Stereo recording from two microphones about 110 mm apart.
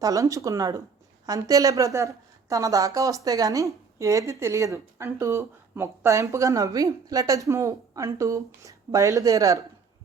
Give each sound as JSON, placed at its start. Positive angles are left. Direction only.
{"t": 0.0, "sound": "a woman's voice", "side_deg": -30}